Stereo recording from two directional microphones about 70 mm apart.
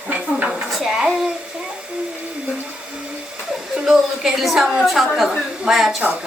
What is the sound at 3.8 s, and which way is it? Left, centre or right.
A woman's voice, centre.